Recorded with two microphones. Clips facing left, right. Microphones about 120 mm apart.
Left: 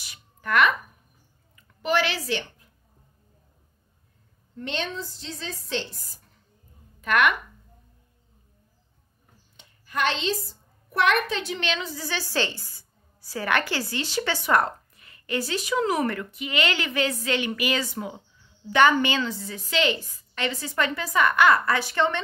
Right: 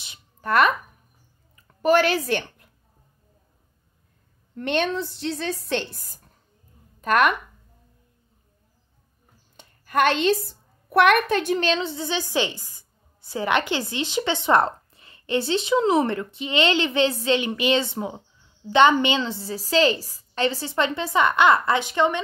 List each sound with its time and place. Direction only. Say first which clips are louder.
0.0 s a sound: right 3 dB; 25° right (ahead or behind)
0.5 s speech: right 2 dB; 40° right (ahead or behind)
1.8 s a woman's voice: right 6 dB; 45° right (ahead or behind)
4.6 s a woman's voice: right 7 dB; 60° right (ahead or behind)
7.0 s a woman's voice: right 3 dB; 40° right (ahead or behind)
9.6 s a woman's voice: right 6 dB; 55° right (ahead or behind); by 22.2 s 15° right (ahead or behind)